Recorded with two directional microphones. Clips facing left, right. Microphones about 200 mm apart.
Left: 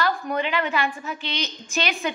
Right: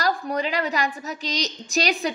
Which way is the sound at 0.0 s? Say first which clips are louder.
Even; 40° right (ahead or behind).